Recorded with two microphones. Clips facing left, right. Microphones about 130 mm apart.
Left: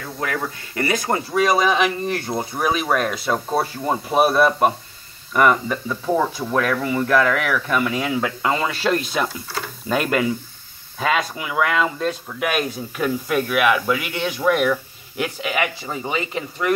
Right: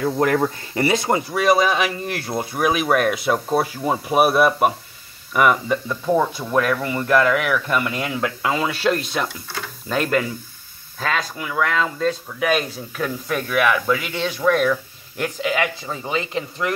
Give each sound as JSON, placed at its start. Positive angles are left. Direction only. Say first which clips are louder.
{"t": 0.4, "sound": "speech", "louder": "right 5 dB", "side_deg": -25}
{"t": 1.1, "sound": "speech", "louder": "left 1 dB", "side_deg": -5}